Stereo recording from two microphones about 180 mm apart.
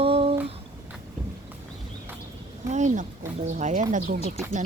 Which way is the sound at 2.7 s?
40° right (ahead or behind).